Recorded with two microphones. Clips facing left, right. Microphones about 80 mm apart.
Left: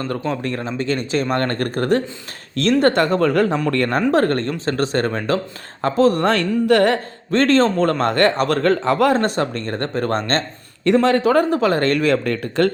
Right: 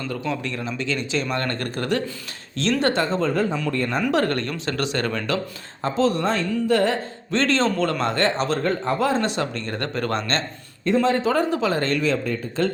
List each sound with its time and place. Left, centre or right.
0.0 s speech: left
4.1 s speech: left
5.8 s speech: left
6.2 s speech: left
8.6 s speech: left
10.8 s speech: left